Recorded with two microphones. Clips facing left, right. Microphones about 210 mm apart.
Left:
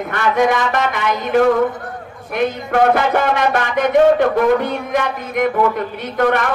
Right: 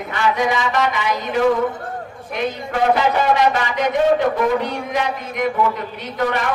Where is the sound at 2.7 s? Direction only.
55° left (ahead or behind).